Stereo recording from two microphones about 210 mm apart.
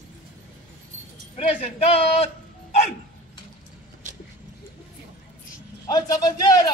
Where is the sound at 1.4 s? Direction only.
30° left (ahead or behind).